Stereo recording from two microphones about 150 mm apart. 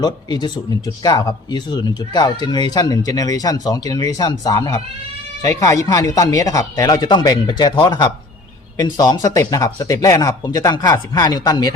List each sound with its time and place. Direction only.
0.0 s speech: 30° left (ahead or behind)